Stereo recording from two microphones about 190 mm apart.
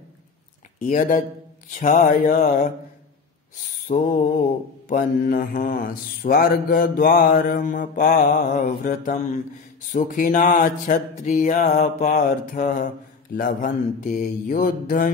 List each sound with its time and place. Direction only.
0.7 s mantra: 45° left (ahead or behind)
3.8 s mantra: 40° left (ahead or behind)